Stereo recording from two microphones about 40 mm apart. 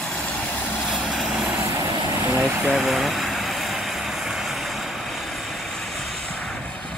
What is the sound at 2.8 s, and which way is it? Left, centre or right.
Vehicle, centre.